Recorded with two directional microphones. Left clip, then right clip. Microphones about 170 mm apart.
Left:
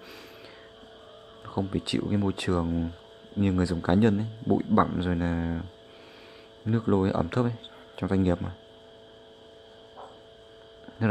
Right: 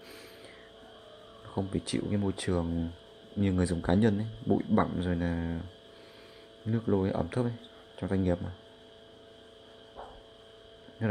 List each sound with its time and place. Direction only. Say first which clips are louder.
1.5 s speech: left 4 dB; 10° left (ahead or behind)
6.7 s speech: left 4 dB; 15° left (ahead or behind)
11.0 s a sound: left 5 dB; 15° left (ahead or behind)